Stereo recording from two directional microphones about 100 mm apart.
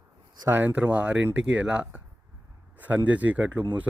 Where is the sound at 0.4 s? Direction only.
20° right (ahead or behind).